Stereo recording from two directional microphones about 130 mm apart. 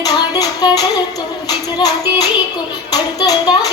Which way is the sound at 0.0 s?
30° left (ahead or behind).